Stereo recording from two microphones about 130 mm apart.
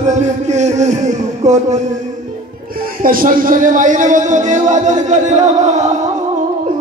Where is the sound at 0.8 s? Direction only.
65° right (ahead or behind).